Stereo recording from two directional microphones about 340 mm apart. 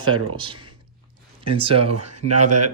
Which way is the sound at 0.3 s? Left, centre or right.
Centre.